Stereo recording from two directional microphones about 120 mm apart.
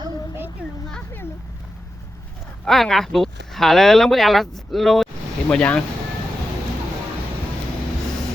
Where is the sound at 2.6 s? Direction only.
Centre (ahead or behind).